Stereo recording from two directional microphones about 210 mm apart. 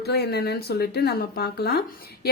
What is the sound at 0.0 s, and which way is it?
A woman's voice, 50° left (ahead or behind).